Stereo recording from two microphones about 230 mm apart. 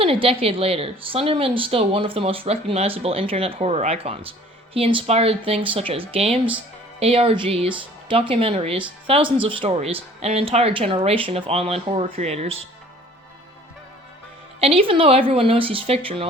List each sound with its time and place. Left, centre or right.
0.0 s a woman's voice: right
14.6 s a woman's voice: right